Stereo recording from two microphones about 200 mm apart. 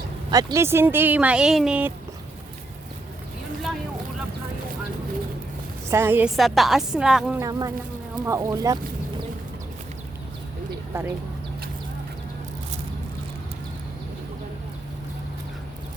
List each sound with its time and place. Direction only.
0.3 s speech: 20° right (ahead or behind)
5.9 s a woman's voice: 10° right (ahead or behind)
7.3 s speech: 15° right (ahead or behind)
10.9 s speech: 15° right (ahead or behind)